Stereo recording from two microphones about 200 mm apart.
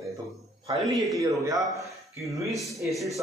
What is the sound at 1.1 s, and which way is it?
Speech, 15° right (ahead or behind).